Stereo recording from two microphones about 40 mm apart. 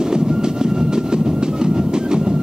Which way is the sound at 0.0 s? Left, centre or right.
Centre.